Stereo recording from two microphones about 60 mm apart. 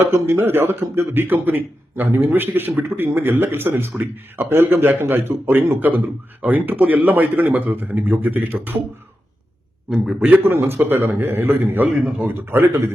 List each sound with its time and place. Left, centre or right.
0.1 s a man's voice: right
9.9 s a man's voice: centre
10.2 s a man's voice: right